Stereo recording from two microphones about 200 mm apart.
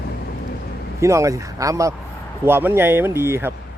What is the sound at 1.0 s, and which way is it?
Speech, 15° right (ahead or behind).